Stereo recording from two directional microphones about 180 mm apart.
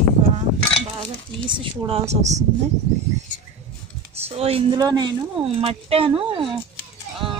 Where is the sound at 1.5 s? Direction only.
30° right (ahead or behind).